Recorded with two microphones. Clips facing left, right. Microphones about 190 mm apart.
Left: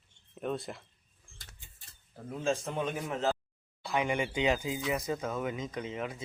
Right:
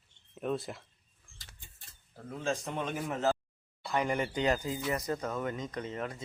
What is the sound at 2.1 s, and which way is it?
Speech, 10° left (ahead or behind).